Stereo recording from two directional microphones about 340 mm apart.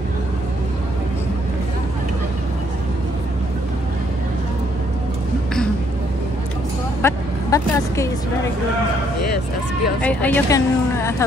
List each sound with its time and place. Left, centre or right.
7.0 s speech: centre
10.0 s a woman's voice: centre